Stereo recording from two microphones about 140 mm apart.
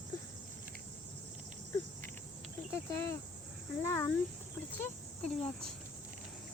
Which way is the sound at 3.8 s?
20° left (ahead or behind).